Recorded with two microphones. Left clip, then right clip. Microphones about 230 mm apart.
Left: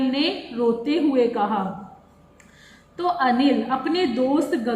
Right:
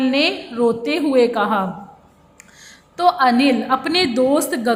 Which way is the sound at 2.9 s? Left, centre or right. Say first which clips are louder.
Right 6 dB; right.